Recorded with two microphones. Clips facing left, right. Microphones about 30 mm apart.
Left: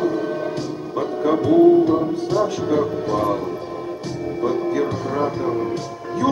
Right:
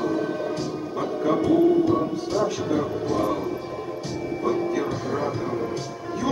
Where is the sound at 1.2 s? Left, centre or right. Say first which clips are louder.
Left 5 dB; centre.